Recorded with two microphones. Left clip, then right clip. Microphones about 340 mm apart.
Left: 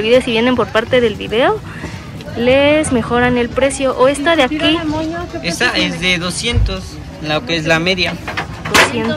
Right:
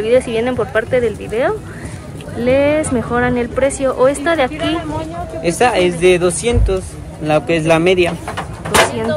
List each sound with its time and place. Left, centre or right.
0.0 s speech: centre
5.4 s speech: centre